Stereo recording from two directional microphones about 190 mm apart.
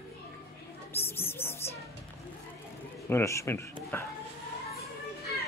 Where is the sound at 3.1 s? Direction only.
15° left (ahead or behind).